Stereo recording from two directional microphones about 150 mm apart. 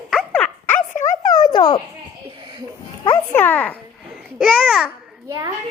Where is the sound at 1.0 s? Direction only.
60° left (ahead or behind).